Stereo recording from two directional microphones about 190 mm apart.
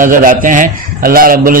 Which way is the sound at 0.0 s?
45° right (ahead or behind).